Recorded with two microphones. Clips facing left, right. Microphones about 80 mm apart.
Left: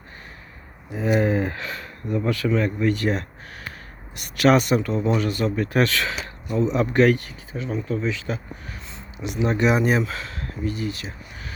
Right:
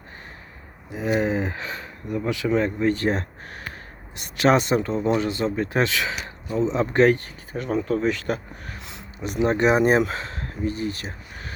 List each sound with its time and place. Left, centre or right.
0.9 s speech: centre
7.5 s speech: right
9.2 s speech: right